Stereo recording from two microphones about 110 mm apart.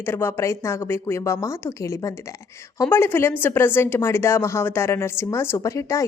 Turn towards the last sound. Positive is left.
turn(degrees=30)  # may be behind; listen again after turning